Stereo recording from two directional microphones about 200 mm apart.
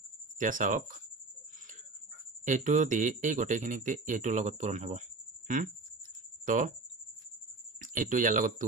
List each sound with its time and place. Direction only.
0.4 s speech: 40° right (ahead or behind)
2.4 s speech: 40° right (ahead or behind)
6.4 s speech: 40° right (ahead or behind)
7.8 s speech: 40° right (ahead or behind)